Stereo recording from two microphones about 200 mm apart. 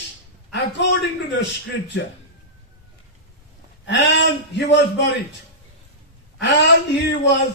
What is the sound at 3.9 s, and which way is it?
A man's voice, 60° left (ahead or behind).